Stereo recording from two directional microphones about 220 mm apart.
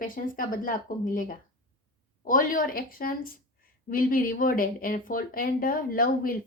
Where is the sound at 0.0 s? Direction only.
40° left (ahead or behind).